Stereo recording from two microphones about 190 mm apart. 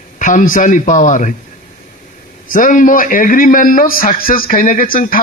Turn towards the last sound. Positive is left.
turn(degrees=45)  # may be behind; listen again after turning